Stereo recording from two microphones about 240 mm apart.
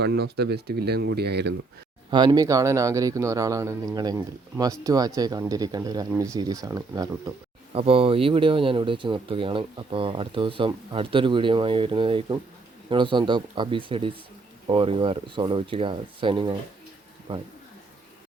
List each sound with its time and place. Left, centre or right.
0.0 s speech: right
2.0 s speech: centre